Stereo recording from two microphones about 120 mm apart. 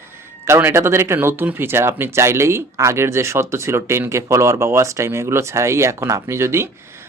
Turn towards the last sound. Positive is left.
turn(degrees=-20)  # may be behind; listen again after turning